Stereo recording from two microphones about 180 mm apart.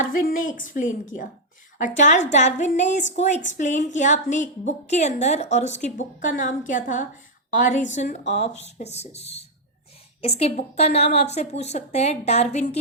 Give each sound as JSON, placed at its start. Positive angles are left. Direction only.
{"t": 0.0, "sound": "a woman's voice", "side_deg": 50}
{"t": 2.0, "sound": "a woman's voice", "side_deg": 40}